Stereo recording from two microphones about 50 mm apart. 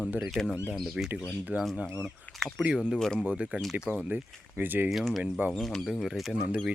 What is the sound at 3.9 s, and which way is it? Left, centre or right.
Speech, right.